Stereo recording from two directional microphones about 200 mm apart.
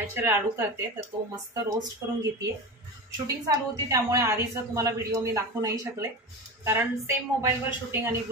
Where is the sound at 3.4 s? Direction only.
15° right (ahead or behind).